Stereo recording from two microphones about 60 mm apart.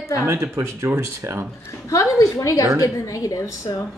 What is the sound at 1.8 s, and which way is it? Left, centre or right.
A woman's voice, left.